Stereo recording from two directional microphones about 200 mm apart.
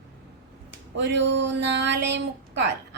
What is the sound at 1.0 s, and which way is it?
A woman's voice, 60° right (ahead or behind).